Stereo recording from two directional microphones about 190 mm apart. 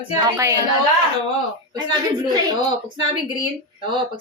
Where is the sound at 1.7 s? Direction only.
20° right (ahead or behind).